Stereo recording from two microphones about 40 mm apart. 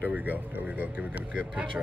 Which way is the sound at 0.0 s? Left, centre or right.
Right.